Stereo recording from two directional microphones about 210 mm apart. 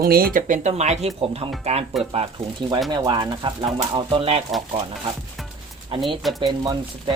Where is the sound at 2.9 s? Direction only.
20° right (ahead or behind).